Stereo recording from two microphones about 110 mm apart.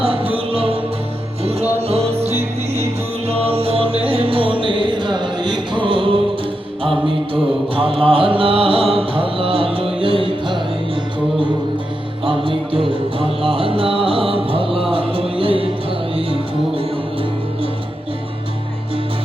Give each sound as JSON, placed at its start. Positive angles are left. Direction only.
{"t": 0.0, "sound": "music", "side_deg": -55}
{"t": 1.5, "sound": "music", "side_deg": -70}
{"t": 7.8, "sound": "music", "side_deg": -55}
{"t": 12.2, "sound": "music", "side_deg": -50}